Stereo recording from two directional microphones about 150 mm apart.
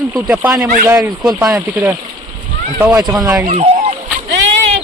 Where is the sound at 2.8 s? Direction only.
15° right (ahead or behind).